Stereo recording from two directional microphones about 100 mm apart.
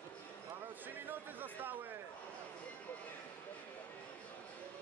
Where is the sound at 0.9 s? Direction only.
20° right (ahead or behind).